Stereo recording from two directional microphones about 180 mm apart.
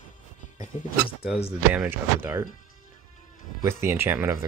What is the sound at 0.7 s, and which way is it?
Speech, 40° left (ahead or behind).